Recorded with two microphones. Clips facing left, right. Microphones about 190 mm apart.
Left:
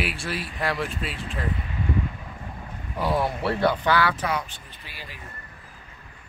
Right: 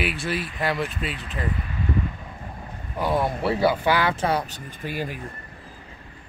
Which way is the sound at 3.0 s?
Centre (ahead or behind).